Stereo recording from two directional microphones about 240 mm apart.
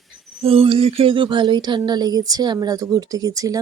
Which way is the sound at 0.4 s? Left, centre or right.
Right.